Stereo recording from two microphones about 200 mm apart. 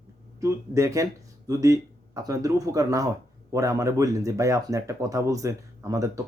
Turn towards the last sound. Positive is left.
turn(degrees=-15)  # may be behind; listen again after turning